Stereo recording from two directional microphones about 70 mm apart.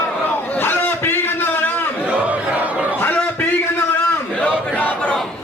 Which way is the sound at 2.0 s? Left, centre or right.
Right.